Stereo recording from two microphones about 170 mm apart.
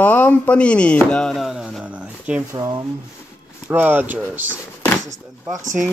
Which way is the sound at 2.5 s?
20° right (ahead or behind).